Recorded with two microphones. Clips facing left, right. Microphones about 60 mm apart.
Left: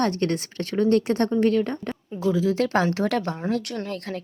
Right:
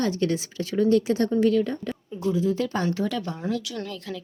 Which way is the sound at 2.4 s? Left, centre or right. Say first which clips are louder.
Left 3 dB; left.